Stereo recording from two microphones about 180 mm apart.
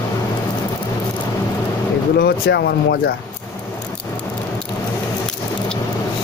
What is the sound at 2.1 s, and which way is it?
Speech, 60° left (ahead or behind).